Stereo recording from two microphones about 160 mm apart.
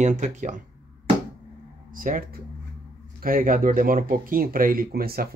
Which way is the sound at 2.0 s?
60° right (ahead or behind).